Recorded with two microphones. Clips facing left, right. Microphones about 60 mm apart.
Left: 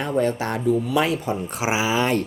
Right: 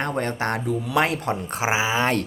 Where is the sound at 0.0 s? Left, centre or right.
Right.